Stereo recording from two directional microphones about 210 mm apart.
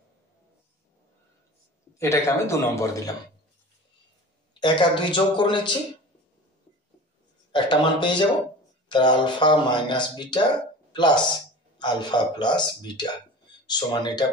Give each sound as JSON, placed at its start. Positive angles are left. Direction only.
{"t": 2.0, "sound": "a man's voice", "side_deg": 15}
{"t": 4.6, "sound": "speech", "side_deg": 20}
{"t": 7.5, "sound": "speech", "side_deg": 20}